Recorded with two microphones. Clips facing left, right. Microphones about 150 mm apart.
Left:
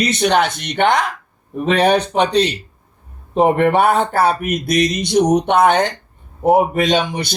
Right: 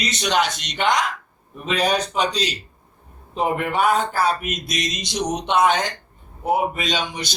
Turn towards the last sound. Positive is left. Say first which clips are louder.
# left 9 dB
turn(degrees=60)  # may be behind; listen again after turning